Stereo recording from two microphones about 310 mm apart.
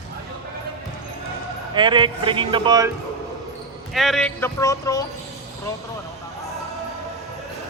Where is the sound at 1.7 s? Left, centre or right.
Centre.